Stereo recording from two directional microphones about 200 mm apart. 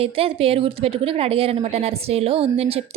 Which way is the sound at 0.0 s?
30° right (ahead or behind).